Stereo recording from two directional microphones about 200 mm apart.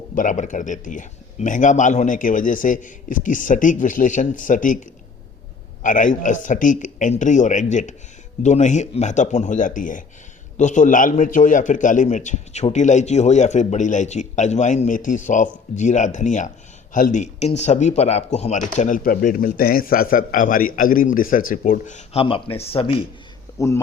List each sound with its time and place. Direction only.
0.1 s speech: 40° left (ahead or behind)
23.6 s speech: 15° left (ahead or behind)